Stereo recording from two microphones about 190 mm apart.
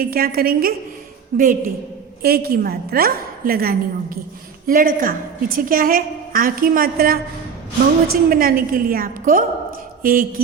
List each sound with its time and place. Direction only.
0.0 s a woman's voice: 50° right (ahead or behind)
8.3 s a woman's voice: 50° right (ahead or behind)